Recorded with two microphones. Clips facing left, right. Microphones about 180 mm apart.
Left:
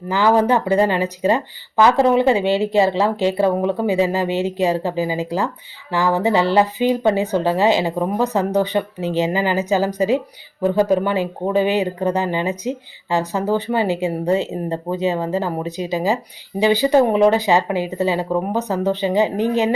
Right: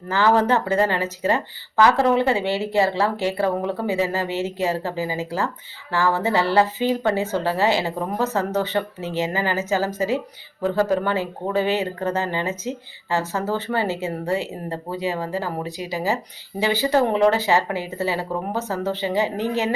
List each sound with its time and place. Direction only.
0.1 s speech: 15° left (ahead or behind)